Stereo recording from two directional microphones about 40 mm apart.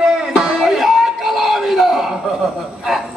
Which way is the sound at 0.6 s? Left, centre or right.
Centre.